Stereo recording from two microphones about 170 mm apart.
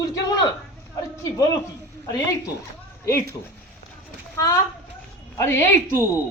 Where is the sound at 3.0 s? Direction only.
15° left (ahead or behind).